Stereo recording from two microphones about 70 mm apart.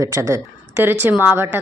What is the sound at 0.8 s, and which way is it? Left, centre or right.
Speech, right.